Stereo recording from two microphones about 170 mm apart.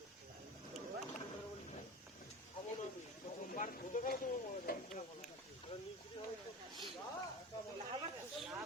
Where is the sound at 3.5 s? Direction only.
50° left (ahead or behind).